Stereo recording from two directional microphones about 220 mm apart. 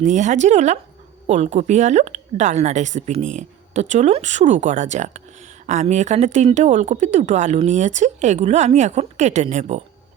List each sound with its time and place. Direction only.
0.0 s speech: 35° right (ahead or behind)